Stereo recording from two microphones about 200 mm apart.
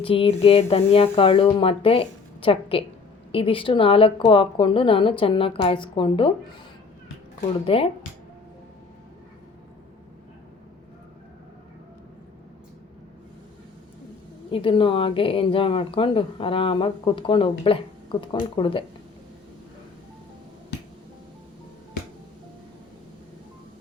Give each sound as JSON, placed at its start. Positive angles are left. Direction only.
{"t": 0.0, "sound": "a woman's voice", "side_deg": 30}
{"t": 7.6, "sound": "a woman's voice", "side_deg": 30}
{"t": 14.5, "sound": "a woman's voice", "side_deg": 25}